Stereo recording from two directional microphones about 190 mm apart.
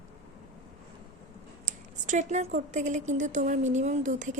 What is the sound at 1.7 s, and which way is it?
Speech, 40° right (ahead or behind).